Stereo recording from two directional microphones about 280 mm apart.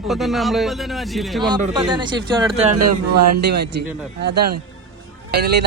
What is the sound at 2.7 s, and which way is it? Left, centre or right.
Speech, right.